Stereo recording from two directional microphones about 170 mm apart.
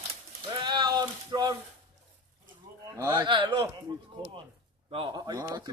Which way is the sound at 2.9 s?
20° right (ahead or behind).